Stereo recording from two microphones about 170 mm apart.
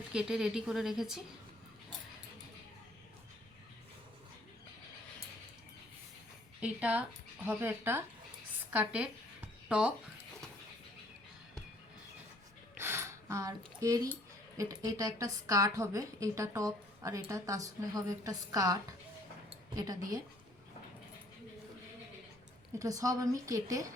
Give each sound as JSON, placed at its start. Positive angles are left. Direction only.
{"t": 0.1, "sound": "speech", "side_deg": -5}
{"t": 6.6, "sound": "speech", "side_deg": -10}
{"t": 12.7, "sound": "a sound", "side_deg": -15}
{"t": 13.7, "sound": "a woman's voice", "side_deg": -20}
{"t": 22.8, "sound": "a woman's voice", "side_deg": -20}